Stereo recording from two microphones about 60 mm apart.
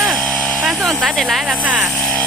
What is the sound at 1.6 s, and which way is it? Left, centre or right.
Speech, right.